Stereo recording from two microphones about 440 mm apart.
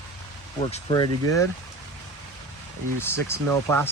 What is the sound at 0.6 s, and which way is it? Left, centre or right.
Speech, centre.